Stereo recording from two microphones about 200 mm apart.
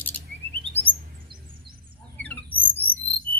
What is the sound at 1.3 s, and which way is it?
Music, 25° right (ahead or behind).